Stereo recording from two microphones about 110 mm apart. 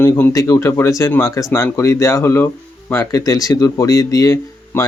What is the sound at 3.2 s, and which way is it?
Speech, 30° left (ahead or behind).